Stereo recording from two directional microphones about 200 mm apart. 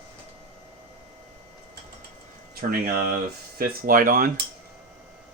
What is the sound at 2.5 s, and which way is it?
Speech, 50° right (ahead or behind).